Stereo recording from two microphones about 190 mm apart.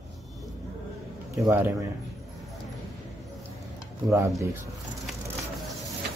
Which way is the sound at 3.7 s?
15° right (ahead or behind).